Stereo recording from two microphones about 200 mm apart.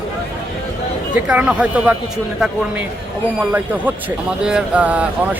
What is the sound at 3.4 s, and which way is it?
Speech, 10° right (ahead or behind).